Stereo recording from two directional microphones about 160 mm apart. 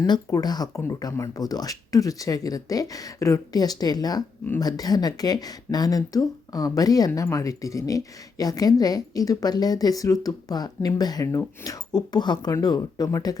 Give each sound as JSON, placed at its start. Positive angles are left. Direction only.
{"t": 0.0, "sound": "speech", "side_deg": 20}